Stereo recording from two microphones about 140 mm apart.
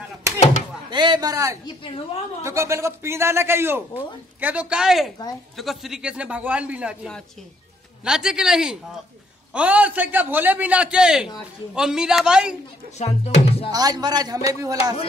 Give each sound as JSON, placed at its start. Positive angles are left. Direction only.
{"t": 0.3, "sound": "a sound", "side_deg": -20}
{"t": 0.8, "sound": "a man's voice", "side_deg": -30}
{"t": 1.8, "sound": "a woman's voice", "side_deg": 40}
{"t": 2.4, "sound": "a man's voice", "side_deg": -20}
{"t": 12.9, "sound": "speech", "side_deg": 50}
{"t": 13.7, "sound": "a man's voice", "side_deg": -30}